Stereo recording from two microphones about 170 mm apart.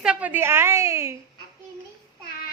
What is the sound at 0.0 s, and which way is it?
A woman's voice, 5° right (ahead or behind).